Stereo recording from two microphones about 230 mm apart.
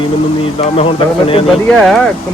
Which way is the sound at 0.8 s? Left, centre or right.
Left.